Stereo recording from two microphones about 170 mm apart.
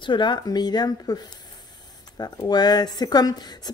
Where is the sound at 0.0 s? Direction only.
25° left (ahead or behind).